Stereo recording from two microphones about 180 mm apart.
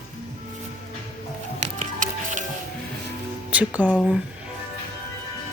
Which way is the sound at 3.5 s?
10° right (ahead or behind).